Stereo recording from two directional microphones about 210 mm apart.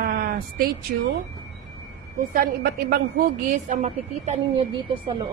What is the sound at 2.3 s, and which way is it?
A woman's voice, 45° right (ahead or behind).